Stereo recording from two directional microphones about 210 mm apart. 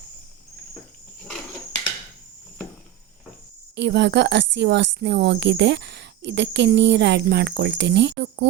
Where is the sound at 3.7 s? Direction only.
55° right (ahead or behind).